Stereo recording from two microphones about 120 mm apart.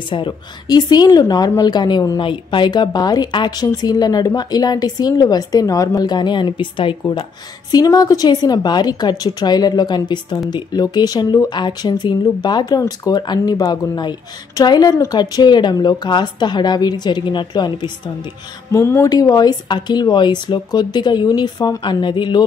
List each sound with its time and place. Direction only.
0.1 s speech: 40° left (ahead or behind)
7.7 s speech: 35° left (ahead or behind)
18.7 s speech: 25° left (ahead or behind); by 22.4 s 40° left (ahead or behind)